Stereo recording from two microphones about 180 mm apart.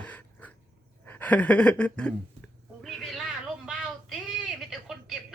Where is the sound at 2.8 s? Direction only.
Centre (ahead or behind).